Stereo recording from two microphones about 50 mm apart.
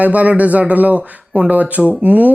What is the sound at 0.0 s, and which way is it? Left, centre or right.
Speech, right.